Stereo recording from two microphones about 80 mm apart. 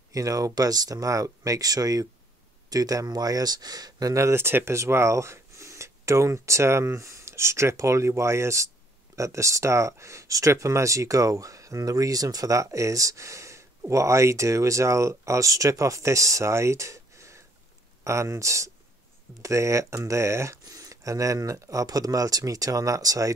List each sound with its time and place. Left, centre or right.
0.1 s speech: right
20.6 s speech: right